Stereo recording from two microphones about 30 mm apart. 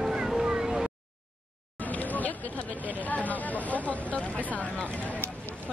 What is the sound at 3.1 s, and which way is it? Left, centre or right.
Speech, left.